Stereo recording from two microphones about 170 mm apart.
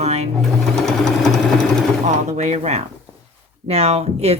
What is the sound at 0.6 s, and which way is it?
Sewing machine, centre (ahead or behind).